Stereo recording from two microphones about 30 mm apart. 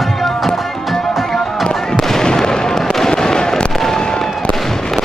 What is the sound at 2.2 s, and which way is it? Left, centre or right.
Fireworks, left.